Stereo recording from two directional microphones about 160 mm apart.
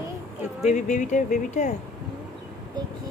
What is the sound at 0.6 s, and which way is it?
Speech, 50° left (ahead or behind).